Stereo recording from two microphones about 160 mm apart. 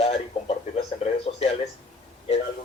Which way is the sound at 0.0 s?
40° left (ahead or behind).